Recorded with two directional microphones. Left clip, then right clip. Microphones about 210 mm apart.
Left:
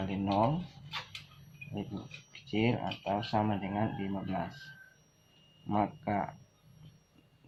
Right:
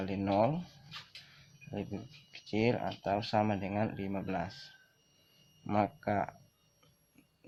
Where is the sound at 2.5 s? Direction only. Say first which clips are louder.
Even; 50° right (ahead or behind).